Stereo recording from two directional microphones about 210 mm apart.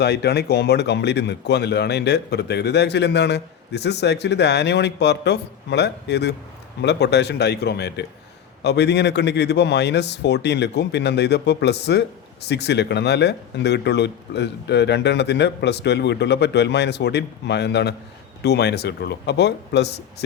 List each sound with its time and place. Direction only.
0.0 s speech: 50° left (ahead or behind)